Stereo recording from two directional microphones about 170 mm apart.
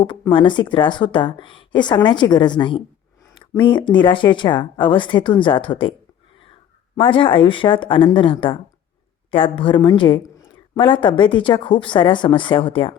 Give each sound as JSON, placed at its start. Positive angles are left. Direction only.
{"t": 0.0, "sound": "a woman's voice", "side_deg": 30}
{"t": 7.0, "sound": "a woman's voice", "side_deg": 30}